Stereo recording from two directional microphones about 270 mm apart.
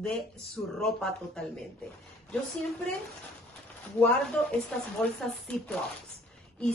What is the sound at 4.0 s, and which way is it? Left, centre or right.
Speech, centre.